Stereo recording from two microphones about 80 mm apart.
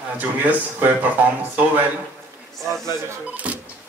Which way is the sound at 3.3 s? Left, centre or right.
Centre.